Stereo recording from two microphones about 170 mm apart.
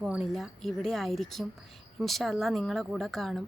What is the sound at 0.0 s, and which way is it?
Speech, 5° right (ahead or behind).